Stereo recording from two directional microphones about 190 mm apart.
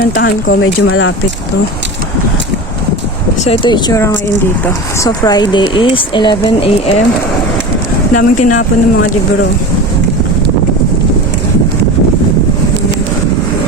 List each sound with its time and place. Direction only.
0.2 s speech: 50° left (ahead or behind)
0.6 s speech: 90° left
3.4 s speech: 30° left (ahead or behind)
8.1 s speech: 45° left (ahead or behind)
8.5 s speech: 90° left